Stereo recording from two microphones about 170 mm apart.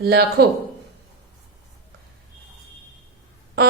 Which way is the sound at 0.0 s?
70° right (ahead or behind).